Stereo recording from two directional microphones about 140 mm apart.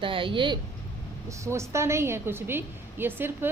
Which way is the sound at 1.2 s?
20° right (ahead or behind).